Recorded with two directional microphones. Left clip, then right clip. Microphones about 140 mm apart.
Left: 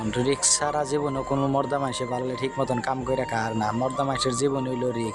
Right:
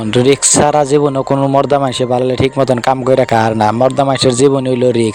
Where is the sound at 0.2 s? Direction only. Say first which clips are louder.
Right 14 dB; 55° right (ahead or behind).